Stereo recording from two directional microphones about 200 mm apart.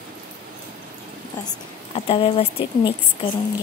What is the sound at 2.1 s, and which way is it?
A woman's voice, 30° left (ahead or behind).